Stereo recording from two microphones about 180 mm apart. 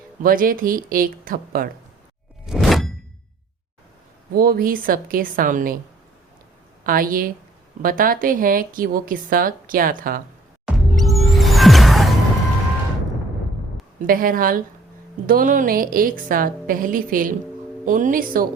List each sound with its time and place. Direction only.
0.2 s speech: 50° right (ahead or behind)
2.5 s a sound: centre (ahead or behind)
4.4 s speech: 55° right (ahead or behind)
6.8 s speech: 50° right (ahead or behind)
10.7 s music: centre (ahead or behind)
14.1 s speech: 50° right (ahead or behind)